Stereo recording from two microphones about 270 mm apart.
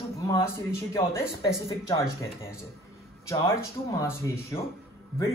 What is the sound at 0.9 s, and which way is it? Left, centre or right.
Speech, centre.